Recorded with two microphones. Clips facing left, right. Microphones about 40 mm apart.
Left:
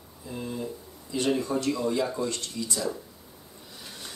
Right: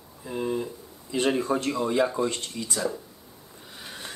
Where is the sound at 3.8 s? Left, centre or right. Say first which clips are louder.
Right 4 dB; right.